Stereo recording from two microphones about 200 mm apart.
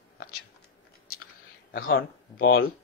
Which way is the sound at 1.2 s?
50° left (ahead or behind).